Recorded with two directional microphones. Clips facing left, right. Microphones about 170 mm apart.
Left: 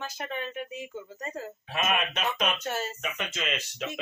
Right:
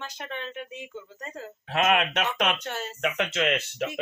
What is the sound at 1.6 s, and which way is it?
Speech, 65° right (ahead or behind).